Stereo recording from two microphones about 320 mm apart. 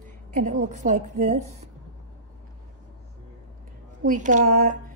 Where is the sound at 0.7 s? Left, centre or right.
Right.